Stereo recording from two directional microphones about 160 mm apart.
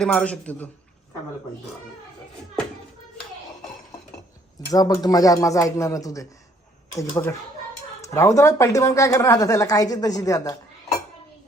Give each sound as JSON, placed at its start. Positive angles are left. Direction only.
{"t": 0.0, "sound": "a man's voice", "side_deg": 5}
{"t": 4.7, "sound": "speech", "side_deg": 25}